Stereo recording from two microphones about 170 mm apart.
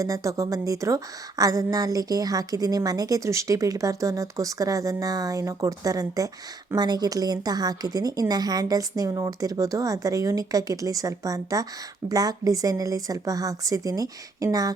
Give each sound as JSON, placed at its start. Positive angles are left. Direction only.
{"t": 0.0, "sound": "speech", "side_deg": -20}